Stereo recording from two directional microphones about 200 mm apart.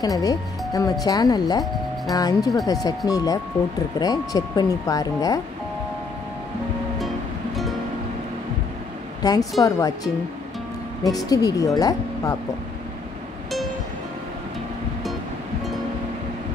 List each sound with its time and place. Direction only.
0.0 s speech: 15° left (ahead or behind)
9.2 s a woman's voice: 20° left (ahead or behind)